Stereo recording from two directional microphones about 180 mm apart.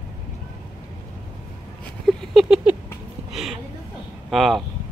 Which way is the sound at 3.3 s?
Centre (ahead or behind).